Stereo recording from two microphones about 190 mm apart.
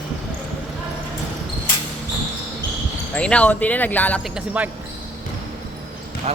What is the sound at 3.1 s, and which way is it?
Speech, 5° left (ahead or behind).